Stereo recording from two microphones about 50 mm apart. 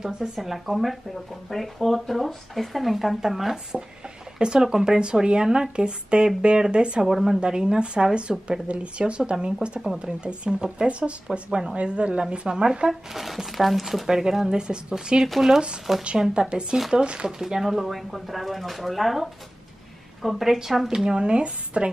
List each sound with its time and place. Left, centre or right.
0.0 s speech: centre
4.4 s speech: centre
7.1 s speech: centre
13.2 s speech: centre
15.9 s speech: centre
16.3 s speech: centre
17.4 s a woman's voice: centre